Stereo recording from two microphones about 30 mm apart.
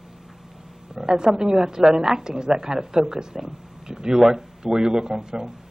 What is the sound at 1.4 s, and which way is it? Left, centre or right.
A woman's voice, right.